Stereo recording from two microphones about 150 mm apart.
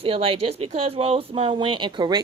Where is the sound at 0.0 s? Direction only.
40° right (ahead or behind).